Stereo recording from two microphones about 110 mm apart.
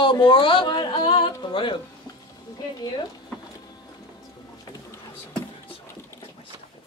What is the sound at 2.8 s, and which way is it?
Speech, 40° left (ahead or behind).